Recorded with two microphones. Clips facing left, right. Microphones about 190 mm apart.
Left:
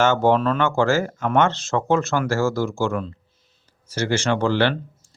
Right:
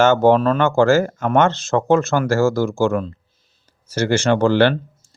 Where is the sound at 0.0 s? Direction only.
45° right (ahead or behind).